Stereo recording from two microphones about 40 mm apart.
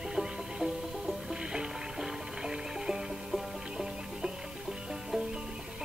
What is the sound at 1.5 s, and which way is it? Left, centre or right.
Music, centre.